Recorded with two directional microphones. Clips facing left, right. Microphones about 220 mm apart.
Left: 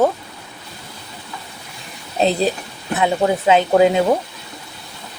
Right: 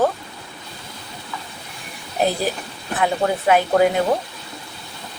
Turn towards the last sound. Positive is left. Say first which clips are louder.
# left 3 dB
turn(degrees=20)  # may be behind; listen again after turning